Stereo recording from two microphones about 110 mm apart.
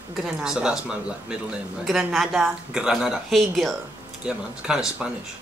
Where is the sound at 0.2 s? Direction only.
5° right (ahead or behind).